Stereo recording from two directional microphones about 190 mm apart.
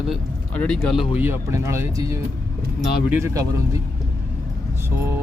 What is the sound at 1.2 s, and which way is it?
Speech, 15° right (ahead or behind).